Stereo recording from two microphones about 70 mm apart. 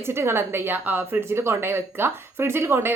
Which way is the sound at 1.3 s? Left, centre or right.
Right.